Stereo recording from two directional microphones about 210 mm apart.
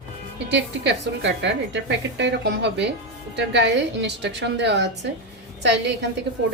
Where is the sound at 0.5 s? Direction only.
55° right (ahead or behind).